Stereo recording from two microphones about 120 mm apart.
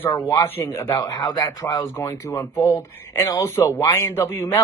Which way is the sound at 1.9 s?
20° left (ahead or behind).